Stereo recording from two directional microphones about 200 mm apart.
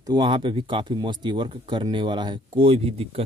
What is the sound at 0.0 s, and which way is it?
Speech, 20° right (ahead or behind).